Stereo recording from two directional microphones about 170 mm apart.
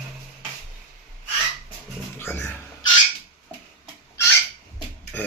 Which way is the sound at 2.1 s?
10° left (ahead or behind).